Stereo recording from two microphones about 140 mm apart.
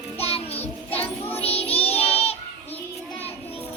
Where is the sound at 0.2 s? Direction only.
45° left (ahead or behind).